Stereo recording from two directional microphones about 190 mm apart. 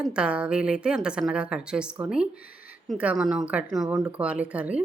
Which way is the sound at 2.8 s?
5° right (ahead or behind).